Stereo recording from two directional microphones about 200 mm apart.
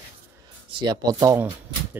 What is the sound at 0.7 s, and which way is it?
Speech, 20° right (ahead or behind).